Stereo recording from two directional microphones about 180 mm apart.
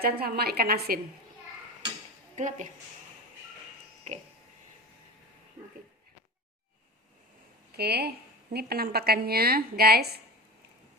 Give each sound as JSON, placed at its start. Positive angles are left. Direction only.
{"t": 0.0, "sound": "a woman's voice", "side_deg": -60}
{"t": 2.3, "sound": "speech", "side_deg": -40}
{"t": 7.8, "sound": "a woman's voice", "side_deg": -65}